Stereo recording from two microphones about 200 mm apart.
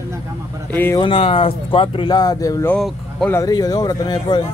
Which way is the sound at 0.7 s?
10° left (ahead or behind).